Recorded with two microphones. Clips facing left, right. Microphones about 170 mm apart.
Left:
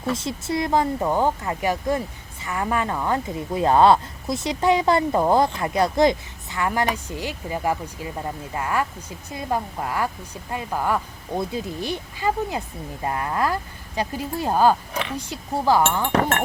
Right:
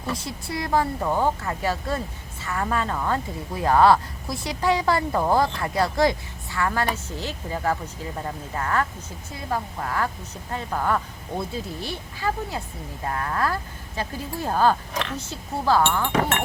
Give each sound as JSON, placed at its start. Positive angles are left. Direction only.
{"t": 0.2, "sound": "a woman's voice", "side_deg": 20}